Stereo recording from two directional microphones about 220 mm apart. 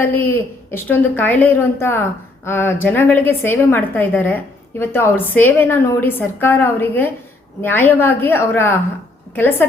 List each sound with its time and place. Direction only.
0.0 s a woman's voice: 10° left (ahead or behind)